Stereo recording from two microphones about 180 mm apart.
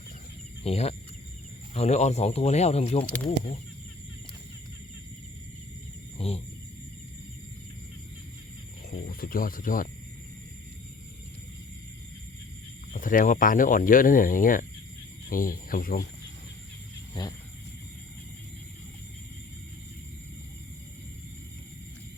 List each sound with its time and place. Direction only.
0.6 s speech: 35° left (ahead or behind)
6.1 s speech: 35° left (ahead or behind)
9.0 s speech: 55° left (ahead or behind)
12.9 s speech: 45° left (ahead or behind)
17.2 s speech: 25° left (ahead or behind)